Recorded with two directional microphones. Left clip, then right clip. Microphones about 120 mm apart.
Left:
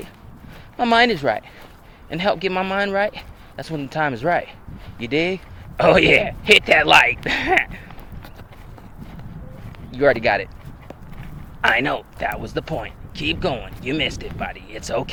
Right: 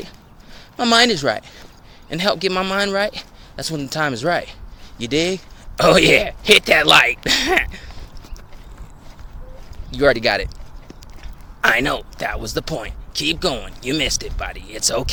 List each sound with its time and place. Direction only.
0.8 s speech: 40° right (ahead or behind)
9.9 s speech: 40° right (ahead or behind)
11.6 s speech: 40° right (ahead or behind)